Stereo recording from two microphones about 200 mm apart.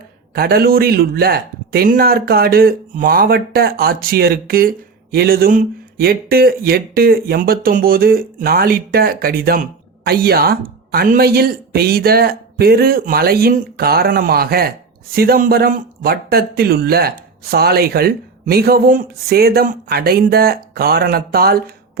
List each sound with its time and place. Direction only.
0.3 s speech: 50° right (ahead or behind)